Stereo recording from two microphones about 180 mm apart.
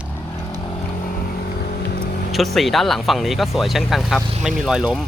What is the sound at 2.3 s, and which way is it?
Speech, centre (ahead or behind).